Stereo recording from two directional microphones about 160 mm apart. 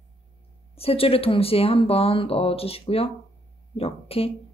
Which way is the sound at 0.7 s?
35° left (ahead or behind).